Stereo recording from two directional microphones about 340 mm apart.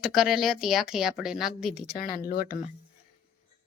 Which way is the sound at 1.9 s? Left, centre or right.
Left.